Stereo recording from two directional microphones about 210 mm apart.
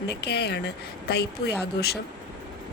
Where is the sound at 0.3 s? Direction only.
50° left (ahead or behind).